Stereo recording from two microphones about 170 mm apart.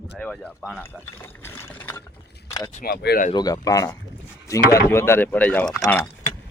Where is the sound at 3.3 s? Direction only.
20° left (ahead or behind).